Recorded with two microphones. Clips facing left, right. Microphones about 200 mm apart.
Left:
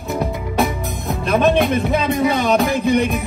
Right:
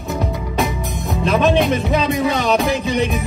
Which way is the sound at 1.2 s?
55° left (ahead or behind).